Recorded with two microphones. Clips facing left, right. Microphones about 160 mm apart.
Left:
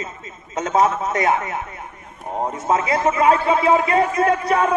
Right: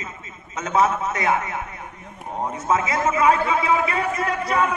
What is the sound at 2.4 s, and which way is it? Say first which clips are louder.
A man's voice: left 2 dB; 40° left (ahead or behind).